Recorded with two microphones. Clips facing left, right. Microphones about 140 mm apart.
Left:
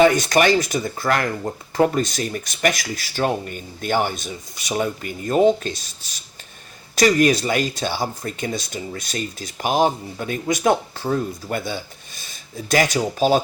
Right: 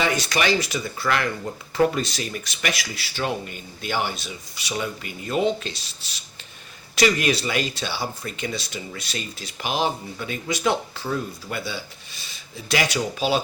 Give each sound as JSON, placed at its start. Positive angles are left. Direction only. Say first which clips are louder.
{"t": 0.0, "sound": "speech", "louder": "left 8 dB", "side_deg": 50}